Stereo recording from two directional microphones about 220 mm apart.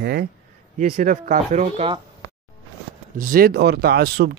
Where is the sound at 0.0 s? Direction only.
45° right (ahead or behind); by 2.0 s 30° right (ahead or behind).